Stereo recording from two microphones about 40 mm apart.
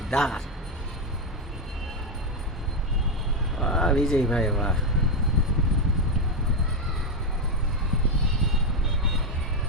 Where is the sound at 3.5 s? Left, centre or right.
Centre.